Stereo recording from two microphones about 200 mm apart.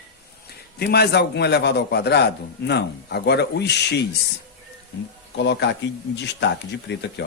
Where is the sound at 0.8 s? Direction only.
55° left (ahead or behind).